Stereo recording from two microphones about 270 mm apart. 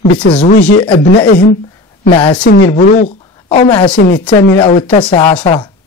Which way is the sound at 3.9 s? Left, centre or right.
Left.